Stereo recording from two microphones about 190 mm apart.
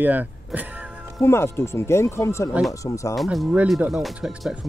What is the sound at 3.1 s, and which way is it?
Speech, centre (ahead or behind).